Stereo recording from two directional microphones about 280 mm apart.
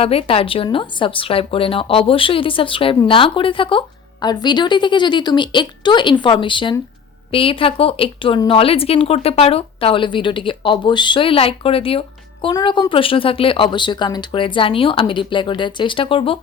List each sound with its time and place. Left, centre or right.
0.0 s a woman's voice: left